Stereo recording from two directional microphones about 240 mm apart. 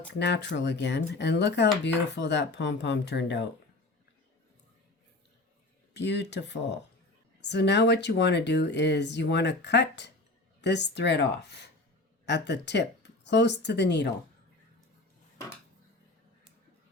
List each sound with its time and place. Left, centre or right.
0.1 s speech: left
5.9 s speech: left